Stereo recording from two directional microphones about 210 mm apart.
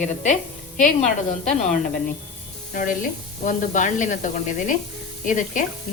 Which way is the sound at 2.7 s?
40° left (ahead or behind).